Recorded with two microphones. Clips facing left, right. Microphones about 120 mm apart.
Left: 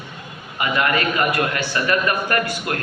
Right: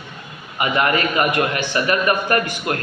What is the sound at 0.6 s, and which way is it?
A man's voice, 25° right (ahead or behind).